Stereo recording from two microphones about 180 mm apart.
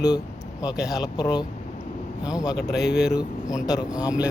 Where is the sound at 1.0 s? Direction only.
20° left (ahead or behind).